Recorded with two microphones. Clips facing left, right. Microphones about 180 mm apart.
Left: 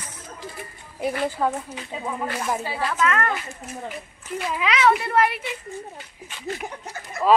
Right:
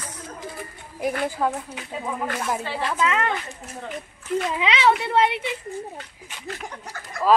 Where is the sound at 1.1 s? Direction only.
5° left (ahead or behind).